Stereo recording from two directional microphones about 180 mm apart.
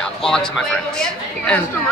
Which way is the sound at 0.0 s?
5° left (ahead or behind).